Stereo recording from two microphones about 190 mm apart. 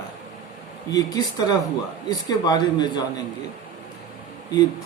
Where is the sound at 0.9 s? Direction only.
20° left (ahead or behind).